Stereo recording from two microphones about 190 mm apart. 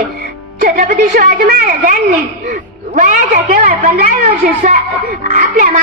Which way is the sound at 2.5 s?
45° right (ahead or behind).